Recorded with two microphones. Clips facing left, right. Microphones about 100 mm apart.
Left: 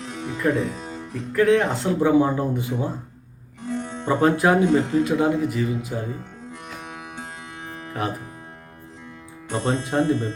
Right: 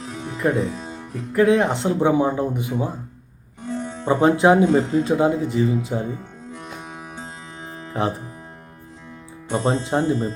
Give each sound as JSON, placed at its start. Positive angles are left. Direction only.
{"t": 0.3, "sound": "music", "side_deg": -30}
{"t": 0.9, "sound": "speech", "side_deg": -20}
{"t": 7.9, "sound": "speech", "side_deg": -25}
{"t": 9.6, "sound": "speech", "side_deg": -30}